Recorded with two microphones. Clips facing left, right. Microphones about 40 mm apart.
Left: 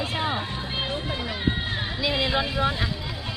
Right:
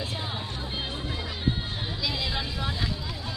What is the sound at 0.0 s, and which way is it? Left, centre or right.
Music, left.